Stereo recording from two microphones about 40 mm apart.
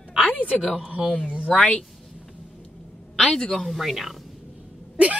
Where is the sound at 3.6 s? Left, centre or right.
Centre.